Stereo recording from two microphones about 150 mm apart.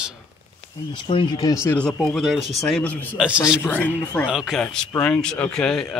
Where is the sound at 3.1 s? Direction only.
5° right (ahead or behind).